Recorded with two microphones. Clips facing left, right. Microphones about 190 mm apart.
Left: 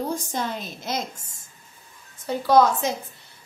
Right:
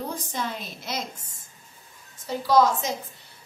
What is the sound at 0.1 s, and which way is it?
Speech, 45° left (ahead or behind).